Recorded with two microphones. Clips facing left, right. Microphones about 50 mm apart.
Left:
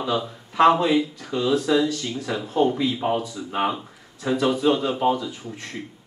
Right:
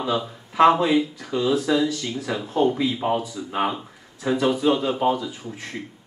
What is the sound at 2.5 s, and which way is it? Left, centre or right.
Speech, centre.